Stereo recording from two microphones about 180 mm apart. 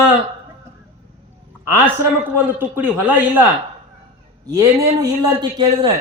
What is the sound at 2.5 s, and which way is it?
Speech, 10° right (ahead or behind).